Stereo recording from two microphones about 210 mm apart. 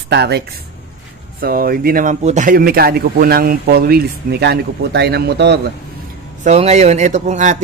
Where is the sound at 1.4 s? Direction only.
45° right (ahead or behind).